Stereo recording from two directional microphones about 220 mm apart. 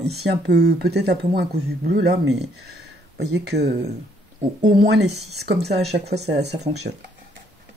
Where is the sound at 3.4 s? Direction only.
50° right (ahead or behind).